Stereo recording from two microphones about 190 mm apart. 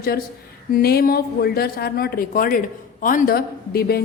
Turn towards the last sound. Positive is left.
turn(degrees=55)  # may be behind; listen again after turning